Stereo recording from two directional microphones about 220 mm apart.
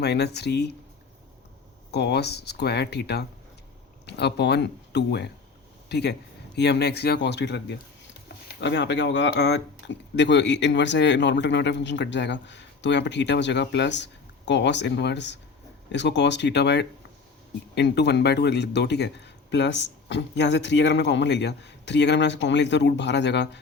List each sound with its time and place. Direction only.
0.0 s speech: 50° left (ahead or behind)
1.9 s speech: 50° left (ahead or behind)